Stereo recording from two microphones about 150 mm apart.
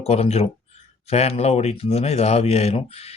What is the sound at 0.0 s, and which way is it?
Speech, 45° left (ahead or behind).